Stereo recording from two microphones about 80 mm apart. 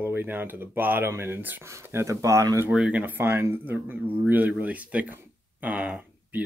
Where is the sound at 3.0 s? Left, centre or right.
Right.